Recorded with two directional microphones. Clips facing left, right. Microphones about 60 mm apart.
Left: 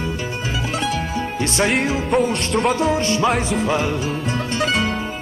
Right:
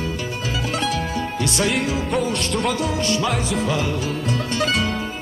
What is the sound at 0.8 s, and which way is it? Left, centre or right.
Music, left.